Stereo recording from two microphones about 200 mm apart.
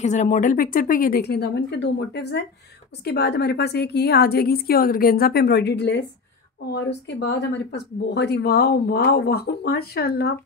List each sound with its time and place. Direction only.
0.0 s a woman's voice: 35° left (ahead or behind); by 10.3 s 50° left (ahead or behind)